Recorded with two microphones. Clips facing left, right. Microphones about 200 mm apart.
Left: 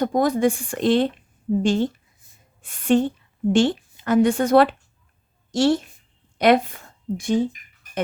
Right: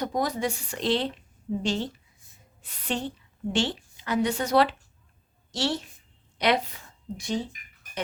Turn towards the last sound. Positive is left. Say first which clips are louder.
# left 9 dB
turn(degrees=50)  # may be behind; listen again after turning